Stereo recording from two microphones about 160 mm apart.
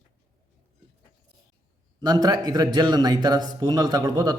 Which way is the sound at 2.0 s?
25° right (ahead or behind).